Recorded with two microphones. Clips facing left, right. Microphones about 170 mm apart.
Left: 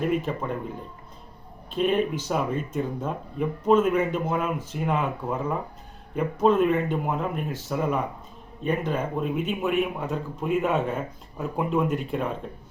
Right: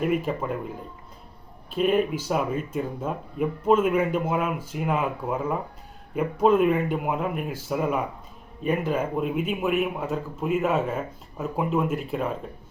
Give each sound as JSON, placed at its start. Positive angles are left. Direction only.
{"t": 0.0, "sound": "speech", "side_deg": -5}
{"t": 1.7, "sound": "speech", "side_deg": -5}